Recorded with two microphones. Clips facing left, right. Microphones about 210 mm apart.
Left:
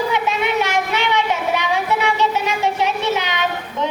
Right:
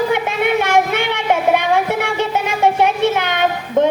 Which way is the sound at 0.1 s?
55° right (ahead or behind).